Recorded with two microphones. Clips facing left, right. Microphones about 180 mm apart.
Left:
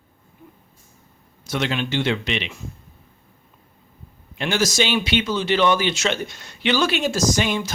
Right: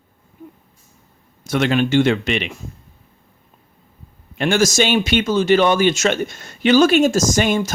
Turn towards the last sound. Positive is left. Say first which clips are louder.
# right 4 dB
turn(degrees=-45)  # may be behind; listen again after turning